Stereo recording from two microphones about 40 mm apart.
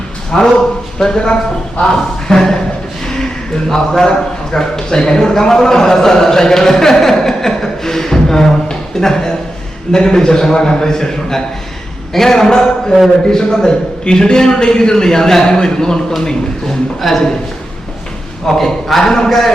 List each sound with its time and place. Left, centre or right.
0.3 s a man's voice: centre
3.1 s a sound: centre
4.5 s a man's voice: centre
17.0 s a man's voice: centre
18.4 s a man's voice: centre